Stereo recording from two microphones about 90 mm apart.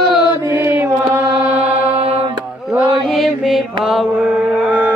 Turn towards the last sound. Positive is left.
turn(degrees=-15)  # may be behind; listen again after turning